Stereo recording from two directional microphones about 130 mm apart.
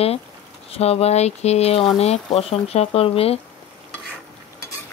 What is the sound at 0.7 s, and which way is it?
Speech, 50° left (ahead or behind).